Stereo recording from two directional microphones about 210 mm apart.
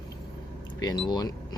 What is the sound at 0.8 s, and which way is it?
Speech, 20° left (ahead or behind).